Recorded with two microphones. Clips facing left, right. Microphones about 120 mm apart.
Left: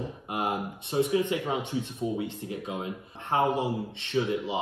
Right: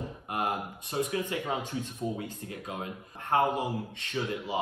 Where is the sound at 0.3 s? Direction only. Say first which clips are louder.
Left 1 dB; 25° left (ahead or behind).